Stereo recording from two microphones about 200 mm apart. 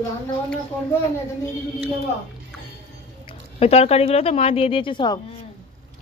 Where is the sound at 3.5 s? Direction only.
30° left (ahead or behind).